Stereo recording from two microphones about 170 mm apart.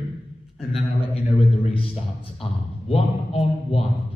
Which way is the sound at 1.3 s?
35° left (ahead or behind).